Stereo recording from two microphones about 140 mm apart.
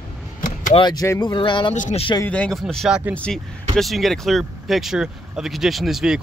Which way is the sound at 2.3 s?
5° left (ahead or behind).